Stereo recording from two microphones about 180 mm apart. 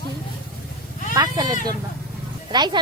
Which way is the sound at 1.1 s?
20° right (ahead or behind).